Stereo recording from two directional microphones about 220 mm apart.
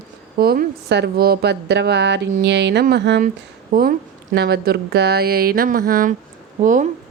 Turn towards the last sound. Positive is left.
turn(degrees=-35)  # may be behind; listen again after turning